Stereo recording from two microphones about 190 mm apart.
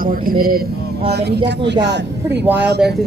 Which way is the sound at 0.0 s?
50° right (ahead or behind).